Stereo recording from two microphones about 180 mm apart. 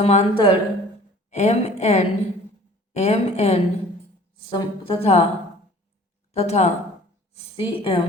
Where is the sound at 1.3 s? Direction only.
40° left (ahead or behind).